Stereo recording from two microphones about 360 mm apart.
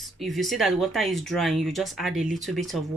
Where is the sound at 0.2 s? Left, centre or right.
Centre.